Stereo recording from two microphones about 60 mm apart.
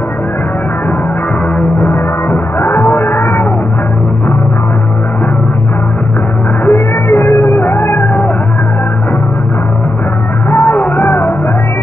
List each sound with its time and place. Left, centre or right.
1.8 s music: left
6.6 s music: left
10.5 s music: left